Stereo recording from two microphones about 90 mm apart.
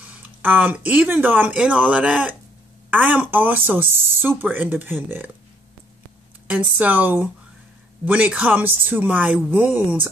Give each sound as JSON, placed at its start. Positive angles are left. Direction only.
{"t": 0.0, "sound": "speech", "side_deg": -20}
{"t": 6.4, "sound": "a man's voice", "side_deg": -15}